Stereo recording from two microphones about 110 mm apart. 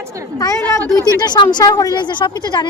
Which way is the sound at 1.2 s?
40° left (ahead or behind).